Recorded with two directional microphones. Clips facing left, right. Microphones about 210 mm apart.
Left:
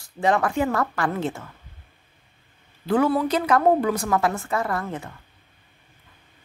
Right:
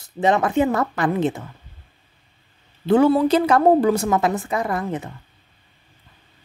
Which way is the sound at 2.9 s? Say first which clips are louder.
Right 5 dB; 25° right (ahead or behind).